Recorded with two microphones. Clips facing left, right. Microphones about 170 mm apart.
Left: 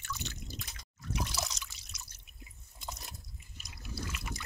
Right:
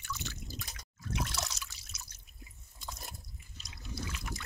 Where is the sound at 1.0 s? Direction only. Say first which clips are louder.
Even; centre (ahead or behind).